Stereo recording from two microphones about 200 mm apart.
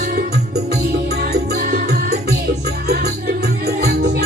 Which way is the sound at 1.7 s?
55° right (ahead or behind).